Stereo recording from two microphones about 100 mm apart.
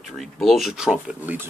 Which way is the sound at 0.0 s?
Centre (ahead or behind).